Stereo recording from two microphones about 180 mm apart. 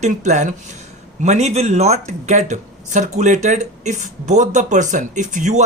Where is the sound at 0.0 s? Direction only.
40° right (ahead or behind).